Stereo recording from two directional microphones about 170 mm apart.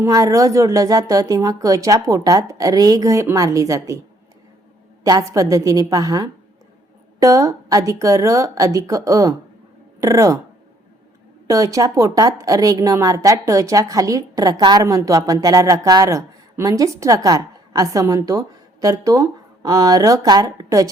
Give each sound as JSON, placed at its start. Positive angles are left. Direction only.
{"t": 0.0, "sound": "a woman's voice", "side_deg": -20}
{"t": 5.0, "sound": "a woman's voice", "side_deg": -20}
{"t": 11.4, "sound": "a woman's voice", "side_deg": -20}